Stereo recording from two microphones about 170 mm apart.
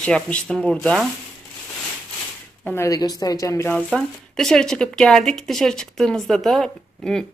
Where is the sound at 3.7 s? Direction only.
5° left (ahead or behind).